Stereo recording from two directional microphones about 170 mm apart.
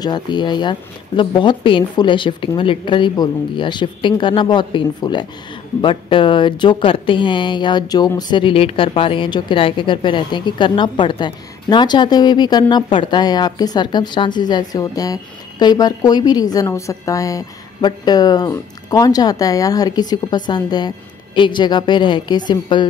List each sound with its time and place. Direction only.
0.0 s speech: 25° left (ahead or behind)